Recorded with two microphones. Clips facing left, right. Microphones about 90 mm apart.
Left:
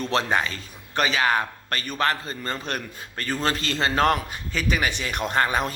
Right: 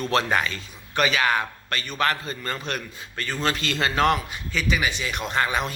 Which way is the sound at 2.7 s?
40° left (ahead or behind).